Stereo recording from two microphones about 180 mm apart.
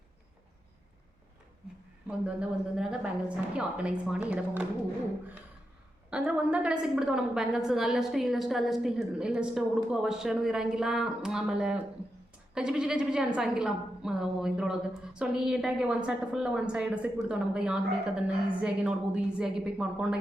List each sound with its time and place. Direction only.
2.0 s a woman's voice: 5° right (ahead or behind)
6.1 s a woman's voice: 5° right (ahead or behind)